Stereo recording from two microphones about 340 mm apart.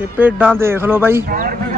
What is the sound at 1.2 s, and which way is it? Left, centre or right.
Speech, right.